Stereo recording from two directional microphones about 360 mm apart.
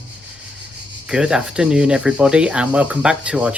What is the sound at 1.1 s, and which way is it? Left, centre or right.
Speech, centre.